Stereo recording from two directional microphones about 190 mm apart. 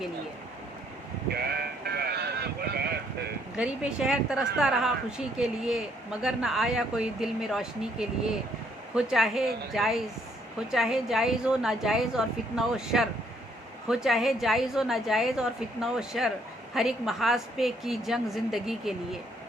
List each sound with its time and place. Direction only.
1.3 s sheep: 55° right (ahead or behind)
3.6 s a woman's voice: 5° right (ahead or behind)